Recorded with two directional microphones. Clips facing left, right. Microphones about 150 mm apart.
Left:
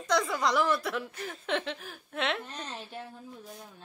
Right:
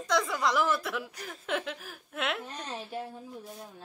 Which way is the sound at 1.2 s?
Centre (ahead or behind).